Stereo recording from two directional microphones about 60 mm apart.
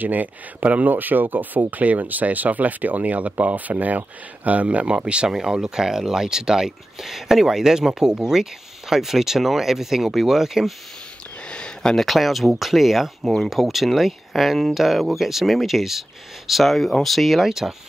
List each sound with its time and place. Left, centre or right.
0.0 s speech: right; by 10.7 s centre
11.4 s speech: centre